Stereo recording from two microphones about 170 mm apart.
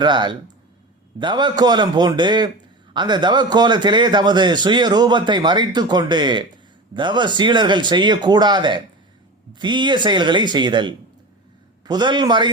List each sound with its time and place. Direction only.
0.0 s a man's voice: 25° right (ahead or behind)